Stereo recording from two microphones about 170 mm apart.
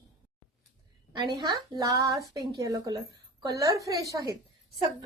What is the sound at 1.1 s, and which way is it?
A woman's voice, 25° right (ahead or behind).